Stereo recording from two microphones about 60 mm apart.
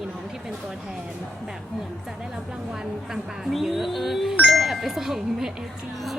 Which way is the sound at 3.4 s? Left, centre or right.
Centre.